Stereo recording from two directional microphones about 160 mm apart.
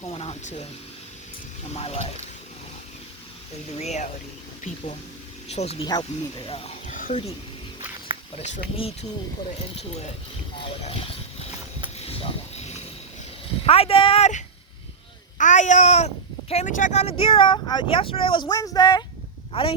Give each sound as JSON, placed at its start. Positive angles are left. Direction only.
{"t": 0.0, "sound": "speech", "side_deg": 40}
{"t": 1.7, "sound": "speech", "side_deg": 40}
{"t": 3.8, "sound": "speech", "side_deg": 45}
{"t": 5.5, "sound": "speech", "side_deg": 45}
{"t": 5.8, "sound": "speech", "side_deg": 30}
{"t": 6.8, "sound": "a sound", "side_deg": 55}
{"t": 8.4, "sound": "speech", "side_deg": 45}
{"t": 10.6, "sound": "a sound", "side_deg": 35}
{"t": 13.7, "sound": "speech", "side_deg": 35}